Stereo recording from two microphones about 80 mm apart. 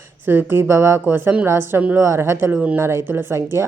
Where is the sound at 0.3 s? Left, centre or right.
Right.